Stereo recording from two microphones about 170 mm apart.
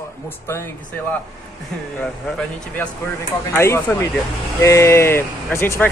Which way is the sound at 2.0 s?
5° left (ahead or behind).